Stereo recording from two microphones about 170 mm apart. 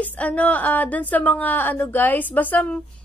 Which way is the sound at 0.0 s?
10° left (ahead or behind).